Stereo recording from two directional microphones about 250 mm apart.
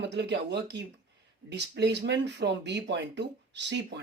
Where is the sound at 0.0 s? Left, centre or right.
Right.